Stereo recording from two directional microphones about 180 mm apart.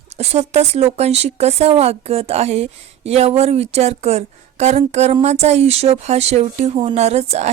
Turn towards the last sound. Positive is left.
turn(degrees=-35)  # may be behind; listen again after turning